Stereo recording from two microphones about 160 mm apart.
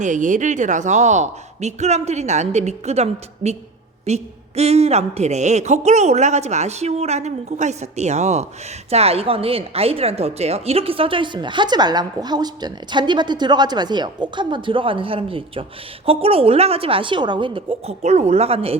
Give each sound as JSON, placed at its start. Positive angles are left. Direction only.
{"t": 0.0, "sound": "speech", "side_deg": -55}